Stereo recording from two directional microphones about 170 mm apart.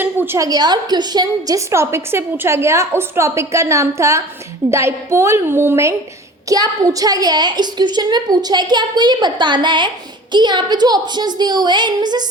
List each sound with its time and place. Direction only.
0.0 s a woman's voice: 15° right (ahead or behind)